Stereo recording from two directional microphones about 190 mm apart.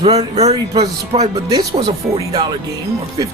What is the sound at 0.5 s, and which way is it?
Speech, 20° right (ahead or behind).